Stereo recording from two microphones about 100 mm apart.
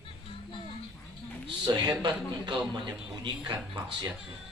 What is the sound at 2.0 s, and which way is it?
Speech, 50° right (ahead or behind).